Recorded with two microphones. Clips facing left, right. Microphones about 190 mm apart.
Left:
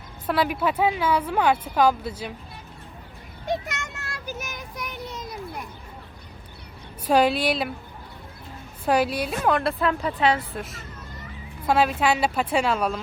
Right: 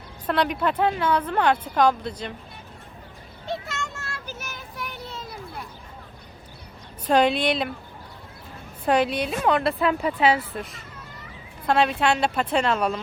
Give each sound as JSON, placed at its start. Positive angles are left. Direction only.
{"t": 0.3, "sound": "speech", "side_deg": 5}
{"t": 3.4, "sound": "child singing", "side_deg": 15}
{"t": 7.1, "sound": "speech", "side_deg": 5}
{"t": 8.9, "sound": "speech", "side_deg": 5}